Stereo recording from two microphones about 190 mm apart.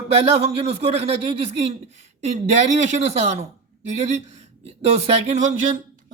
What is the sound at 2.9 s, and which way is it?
Speech, 40° right (ahead or behind).